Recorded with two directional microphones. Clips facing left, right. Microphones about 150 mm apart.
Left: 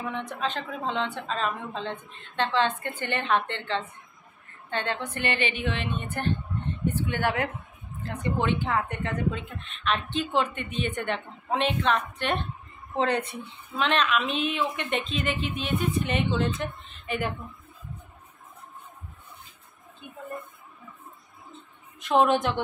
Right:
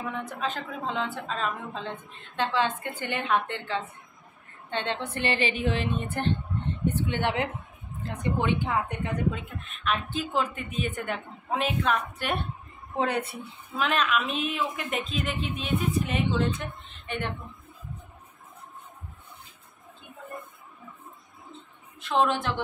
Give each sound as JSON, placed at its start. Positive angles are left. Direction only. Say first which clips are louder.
{"t": 0.1, "sound": "a woman's voice", "louder": "left 1 dB", "side_deg": -5}
{"t": 4.6, "sound": "a woman's voice", "louder": "even", "side_deg": -20}
{"t": 22.0, "sound": "a woman's voice", "louder": "left 3 dB", "side_deg": 15}